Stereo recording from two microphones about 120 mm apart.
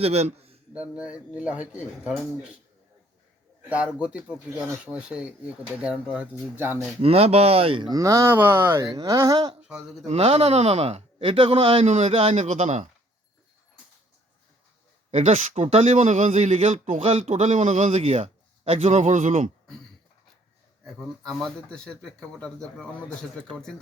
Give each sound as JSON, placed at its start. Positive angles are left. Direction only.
{"t": 0.0, "sound": "a man's voice", "side_deg": -60}
{"t": 0.7, "sound": "speech", "side_deg": -10}
{"t": 3.7, "sound": "speech", "side_deg": -10}
{"t": 7.0, "sound": "speech", "side_deg": -55}
{"t": 7.9, "sound": "speech", "side_deg": -30}
{"t": 8.8, "sound": "speech", "side_deg": -35}
{"t": 9.6, "sound": "speech", "side_deg": -5}
{"t": 10.1, "sound": "speech", "side_deg": -60}
{"t": 15.1, "sound": "speech", "side_deg": -75}
{"t": 20.8, "sound": "speech", "side_deg": 0}